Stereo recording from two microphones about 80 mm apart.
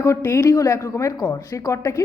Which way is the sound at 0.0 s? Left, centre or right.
Left.